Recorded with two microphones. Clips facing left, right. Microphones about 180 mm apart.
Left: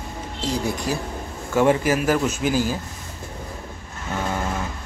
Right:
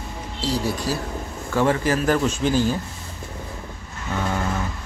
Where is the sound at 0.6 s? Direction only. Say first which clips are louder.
Even; 20° left (ahead or behind).